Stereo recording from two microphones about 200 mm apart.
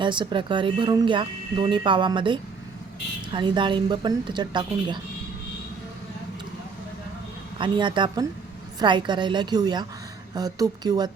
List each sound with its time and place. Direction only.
0.0 s speech: 25° right (ahead or behind)
7.6 s speech: 25° right (ahead or behind)